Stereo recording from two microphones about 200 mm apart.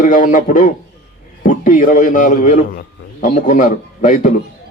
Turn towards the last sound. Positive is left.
turn(degrees=40)  # may be behind; listen again after turning